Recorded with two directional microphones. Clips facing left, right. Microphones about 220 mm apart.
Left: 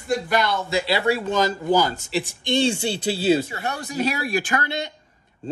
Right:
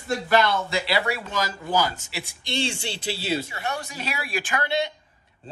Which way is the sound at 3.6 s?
45° left (ahead or behind).